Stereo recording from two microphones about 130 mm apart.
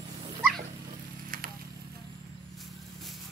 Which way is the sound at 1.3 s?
90° right.